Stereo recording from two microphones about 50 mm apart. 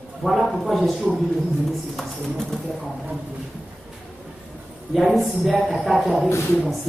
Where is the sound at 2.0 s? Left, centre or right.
Centre.